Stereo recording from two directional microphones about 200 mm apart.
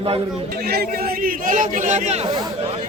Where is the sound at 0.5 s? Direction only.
50° right (ahead or behind); by 2.4 s 30° right (ahead or behind).